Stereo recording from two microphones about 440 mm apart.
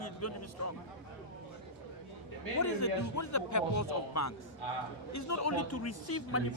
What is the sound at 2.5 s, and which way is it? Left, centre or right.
Speech, left.